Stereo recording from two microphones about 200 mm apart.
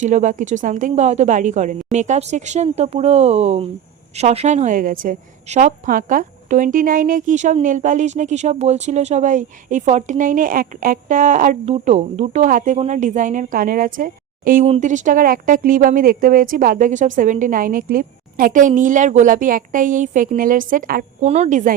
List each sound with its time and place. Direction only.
0.0 s a woman's voice: 40° right (ahead or behind)